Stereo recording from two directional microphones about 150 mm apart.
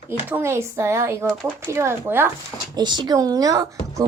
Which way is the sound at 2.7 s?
30° right (ahead or behind).